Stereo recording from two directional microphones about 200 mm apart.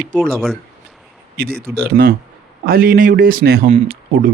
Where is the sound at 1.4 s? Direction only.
50° right (ahead or behind).